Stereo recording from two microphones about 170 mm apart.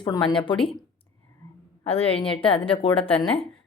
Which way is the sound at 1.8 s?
35° left (ahead or behind).